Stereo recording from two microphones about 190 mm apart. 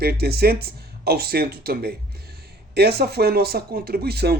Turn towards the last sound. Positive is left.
turn(degrees=-55)  # may be behind; listen again after turning